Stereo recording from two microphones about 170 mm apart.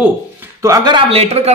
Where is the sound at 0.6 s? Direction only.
20° right (ahead or behind).